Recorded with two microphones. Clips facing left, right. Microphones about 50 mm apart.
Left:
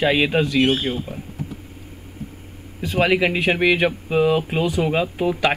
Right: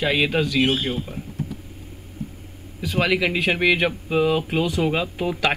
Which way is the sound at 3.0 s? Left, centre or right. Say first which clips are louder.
Left 3 dB; left.